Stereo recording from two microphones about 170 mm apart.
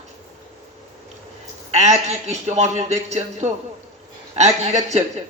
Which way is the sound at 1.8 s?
40° right (ahead or behind).